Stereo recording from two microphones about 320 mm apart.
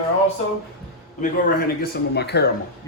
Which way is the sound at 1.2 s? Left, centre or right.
Left.